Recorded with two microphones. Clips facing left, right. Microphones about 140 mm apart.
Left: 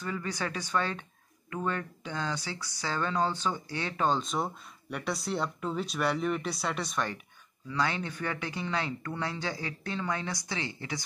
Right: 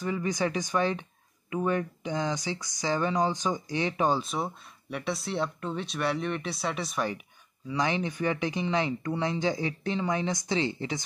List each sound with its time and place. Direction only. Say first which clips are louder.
0.0 s speech: right 6 dB; 15° right (ahead or behind)
7.6 s speech: right 3 dB; 15° right (ahead or behind)